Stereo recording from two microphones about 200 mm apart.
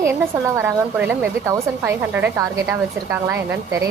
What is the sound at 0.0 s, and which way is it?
A woman's voice, 10° right (ahead or behind).